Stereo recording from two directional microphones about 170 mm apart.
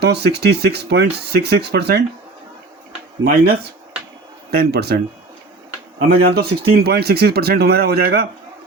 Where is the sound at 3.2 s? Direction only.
65° right (ahead or behind).